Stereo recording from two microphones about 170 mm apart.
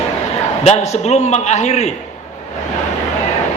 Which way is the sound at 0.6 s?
40° left (ahead or behind).